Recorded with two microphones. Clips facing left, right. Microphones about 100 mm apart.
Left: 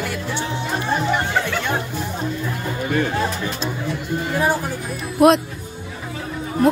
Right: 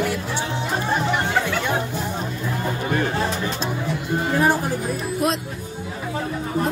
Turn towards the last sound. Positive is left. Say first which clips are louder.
# left 9 dB
turn(degrees=70)  # may be behind; listen again after turning